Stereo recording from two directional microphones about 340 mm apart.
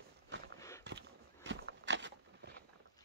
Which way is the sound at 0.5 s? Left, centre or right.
Centre.